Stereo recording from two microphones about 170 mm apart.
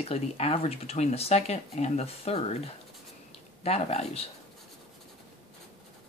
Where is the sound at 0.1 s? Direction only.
35° left (ahead or behind).